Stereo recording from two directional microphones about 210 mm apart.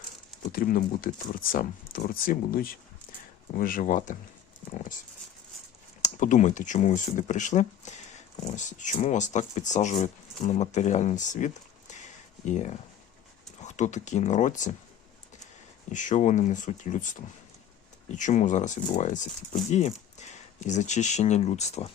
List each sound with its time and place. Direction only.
0.5 s speech: 40° left (ahead or behind)
4.7 s dog: 40° left (ahead or behind)
6.0 s speech: 35° left (ahead or behind)
15.9 s speech: 35° left (ahead or behind)